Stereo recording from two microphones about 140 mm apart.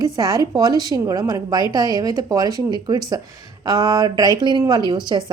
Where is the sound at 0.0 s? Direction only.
25° right (ahead or behind).